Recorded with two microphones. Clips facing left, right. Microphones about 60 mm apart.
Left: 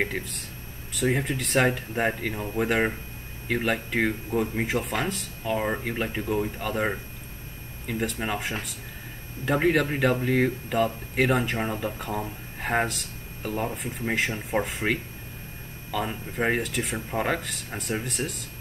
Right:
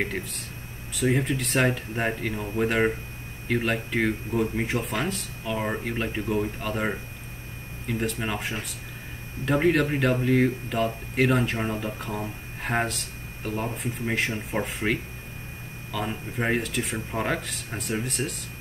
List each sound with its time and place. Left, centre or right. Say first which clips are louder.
0.9 s speech: right 1 dB; centre
5.4 s speech: left 2 dB; centre
5.7 s speech: even; centre